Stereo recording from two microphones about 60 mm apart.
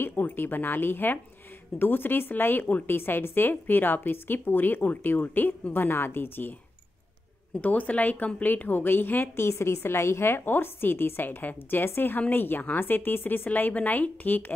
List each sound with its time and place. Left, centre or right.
0.0 s a woman's voice: left
7.5 s a woman's voice: left